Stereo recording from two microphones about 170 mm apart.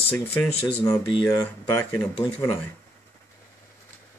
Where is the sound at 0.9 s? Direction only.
20° left (ahead or behind).